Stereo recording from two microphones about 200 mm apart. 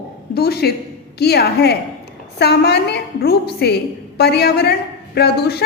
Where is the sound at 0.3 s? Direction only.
50° left (ahead or behind).